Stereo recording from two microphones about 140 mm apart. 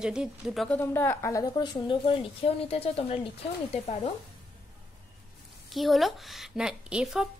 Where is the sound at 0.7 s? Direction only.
15° left (ahead or behind).